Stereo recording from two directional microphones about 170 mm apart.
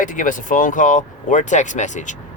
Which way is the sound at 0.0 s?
50° left (ahead or behind).